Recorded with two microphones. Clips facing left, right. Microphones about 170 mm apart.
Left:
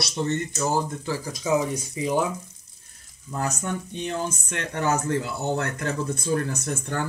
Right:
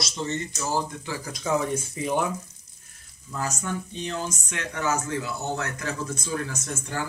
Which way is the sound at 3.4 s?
55° left (ahead or behind).